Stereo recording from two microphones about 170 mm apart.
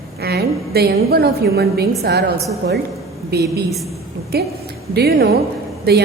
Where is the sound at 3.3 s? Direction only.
75° right (ahead or behind).